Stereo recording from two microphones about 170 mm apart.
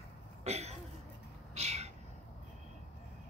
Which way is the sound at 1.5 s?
40° right (ahead or behind).